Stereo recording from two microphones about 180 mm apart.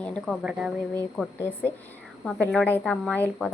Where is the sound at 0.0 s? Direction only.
5° left (ahead or behind).